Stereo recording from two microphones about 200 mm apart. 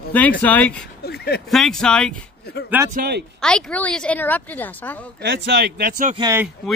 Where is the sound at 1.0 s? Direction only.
55° left (ahead or behind).